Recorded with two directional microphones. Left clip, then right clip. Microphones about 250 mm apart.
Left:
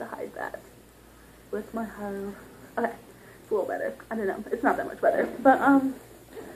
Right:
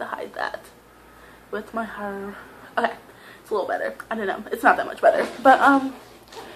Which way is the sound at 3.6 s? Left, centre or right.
Centre.